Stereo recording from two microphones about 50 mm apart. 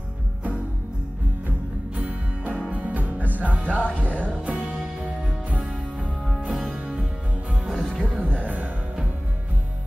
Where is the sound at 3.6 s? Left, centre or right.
Left.